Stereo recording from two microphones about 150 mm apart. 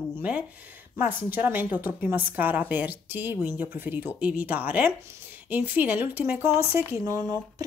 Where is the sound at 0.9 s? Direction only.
15° right (ahead or behind).